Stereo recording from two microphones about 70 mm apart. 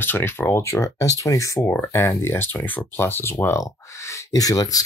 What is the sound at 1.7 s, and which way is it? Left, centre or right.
Speech, left.